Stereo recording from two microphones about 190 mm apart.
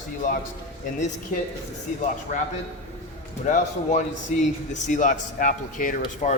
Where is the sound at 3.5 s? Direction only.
40° left (ahead or behind).